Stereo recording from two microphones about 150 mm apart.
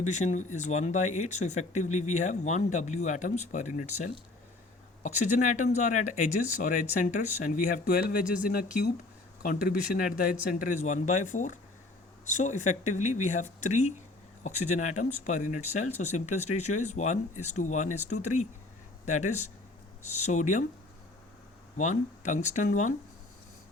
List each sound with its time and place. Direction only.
0.0 s speech: 50° left (ahead or behind)
21.8 s speech: 55° left (ahead or behind)